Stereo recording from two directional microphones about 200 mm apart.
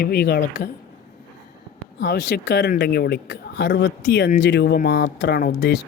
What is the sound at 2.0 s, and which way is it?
Speech, 60° left (ahead or behind).